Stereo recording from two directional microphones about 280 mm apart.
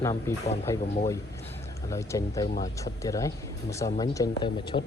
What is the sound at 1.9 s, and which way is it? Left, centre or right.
Speech, centre.